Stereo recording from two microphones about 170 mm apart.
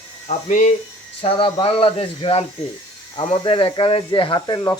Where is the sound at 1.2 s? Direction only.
35° left (ahead or behind).